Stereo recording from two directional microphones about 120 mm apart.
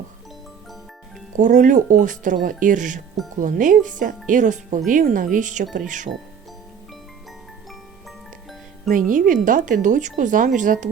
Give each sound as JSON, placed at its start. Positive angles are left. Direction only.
{"t": 1.4, "sound": "speech", "side_deg": -90}
{"t": 9.0, "sound": "speech", "side_deg": -90}